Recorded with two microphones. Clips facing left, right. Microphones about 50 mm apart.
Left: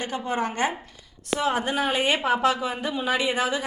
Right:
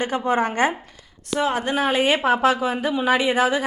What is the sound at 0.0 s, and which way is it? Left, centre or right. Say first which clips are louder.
Speech: right 6 dB; right.